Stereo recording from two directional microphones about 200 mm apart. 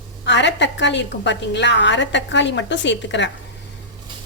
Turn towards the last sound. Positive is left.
turn(degrees=65)  # may be behind; listen again after turning